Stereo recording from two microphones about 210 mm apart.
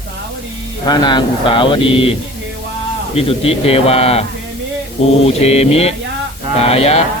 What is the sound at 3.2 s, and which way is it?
Speech, 25° left (ahead or behind).